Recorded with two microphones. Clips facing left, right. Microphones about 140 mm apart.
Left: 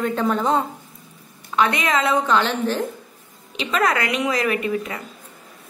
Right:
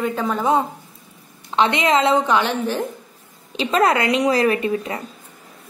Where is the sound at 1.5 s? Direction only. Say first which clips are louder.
Right 3 dB; 25° right (ahead or behind).